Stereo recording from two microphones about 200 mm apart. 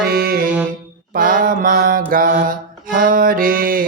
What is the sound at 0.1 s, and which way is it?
Music, 50° right (ahead or behind).